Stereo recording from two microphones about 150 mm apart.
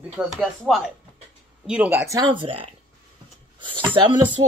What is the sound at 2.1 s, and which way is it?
Speech, 30° right (ahead or behind).